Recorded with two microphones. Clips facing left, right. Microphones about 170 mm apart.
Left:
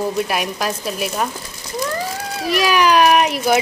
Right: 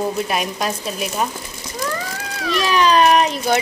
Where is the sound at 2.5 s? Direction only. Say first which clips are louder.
Left 1 dB; 10° left (ahead or behind).